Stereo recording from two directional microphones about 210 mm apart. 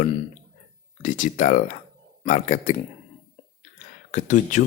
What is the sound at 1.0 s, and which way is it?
Speech, 35° left (ahead or behind).